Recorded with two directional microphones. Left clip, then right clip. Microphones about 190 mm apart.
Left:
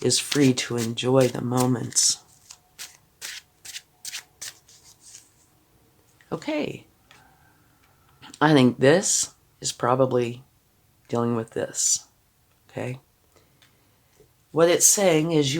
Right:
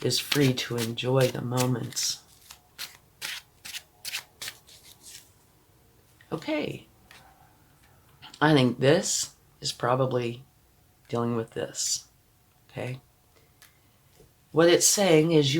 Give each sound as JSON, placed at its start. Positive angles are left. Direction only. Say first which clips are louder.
{"t": 0.0, "sound": "speech", "louder": "left 4 dB", "side_deg": 55}
{"t": 0.3, "sound": "speech", "louder": "left 3 dB", "side_deg": 5}
{"t": 0.5, "sound": "speech", "louder": "left 3 dB", "side_deg": 50}
{"t": 2.5, "sound": "shuffling cards", "louder": "right 1 dB", "side_deg": 10}
{"t": 6.2, "sound": "speech", "louder": "left 2 dB", "side_deg": 50}
{"t": 8.2, "sound": "speech", "louder": "left 4 dB", "side_deg": 50}
{"t": 12.6, "sound": "a sound", "louder": "left 4 dB", "side_deg": 50}
{"t": 14.5, "sound": "speech", "louder": "left 2 dB", "side_deg": 50}